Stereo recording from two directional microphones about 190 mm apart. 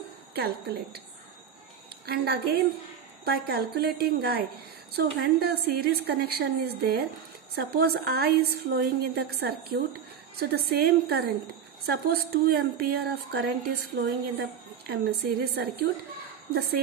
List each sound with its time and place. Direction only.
0.3 s speech: 55° right (ahead or behind)
2.0 s speech: 55° right (ahead or behind)